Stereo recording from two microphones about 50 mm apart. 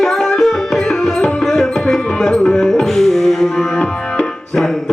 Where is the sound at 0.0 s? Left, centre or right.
Centre.